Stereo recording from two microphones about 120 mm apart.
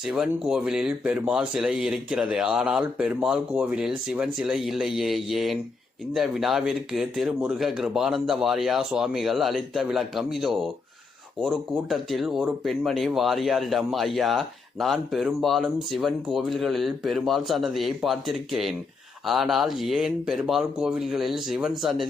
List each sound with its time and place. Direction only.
0.0 s speech: 5° right (ahead or behind)